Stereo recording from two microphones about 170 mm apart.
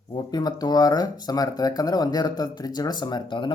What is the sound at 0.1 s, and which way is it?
Speech, 25° left (ahead or behind).